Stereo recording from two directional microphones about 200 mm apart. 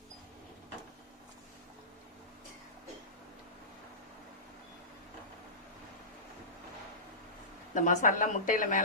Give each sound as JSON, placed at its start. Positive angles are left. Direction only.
{"t": 7.7, "sound": "speech", "side_deg": 40}